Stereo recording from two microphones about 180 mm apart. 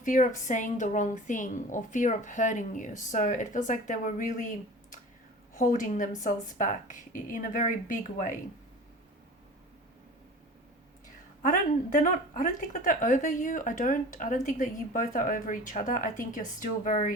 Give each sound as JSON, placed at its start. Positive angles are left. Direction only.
{"t": 0.0, "sound": "a woman's voice", "side_deg": 45}
{"t": 11.4, "sound": "a woman's voice", "side_deg": 45}